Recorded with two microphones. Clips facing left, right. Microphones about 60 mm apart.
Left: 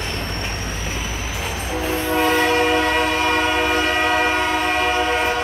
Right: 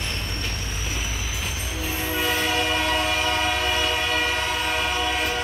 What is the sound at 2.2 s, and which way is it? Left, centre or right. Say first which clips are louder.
Train: left 7 dB; left.